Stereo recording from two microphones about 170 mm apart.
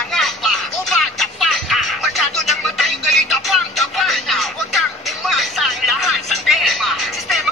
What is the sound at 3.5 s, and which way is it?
Music, centre (ahead or behind).